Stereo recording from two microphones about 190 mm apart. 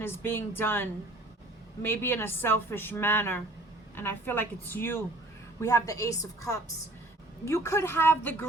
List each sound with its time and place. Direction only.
0.0 s speech: 10° left (ahead or behind)